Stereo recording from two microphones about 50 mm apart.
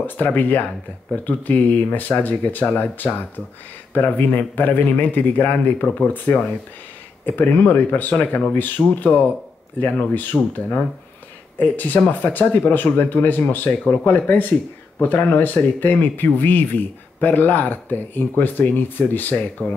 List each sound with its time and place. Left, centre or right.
0.0 s speech: left
11.5 s speech: left